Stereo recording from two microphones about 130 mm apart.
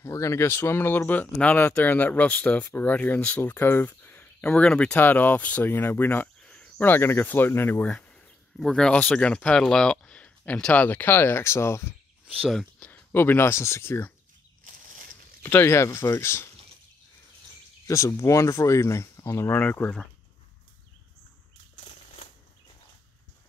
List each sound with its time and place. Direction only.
0.0 s speech: 20° left (ahead or behind)
7.9 s speech: 5° left (ahead or behind)
12.4 s speech: 5° left (ahead or behind)
15.4 s speech: 15° left (ahead or behind)
17.8 s speech: 25° left (ahead or behind)
21.7 s a sound: 55° left (ahead or behind)